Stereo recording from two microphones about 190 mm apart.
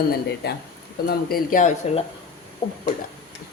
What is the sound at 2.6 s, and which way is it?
Speech, 30° left (ahead or behind).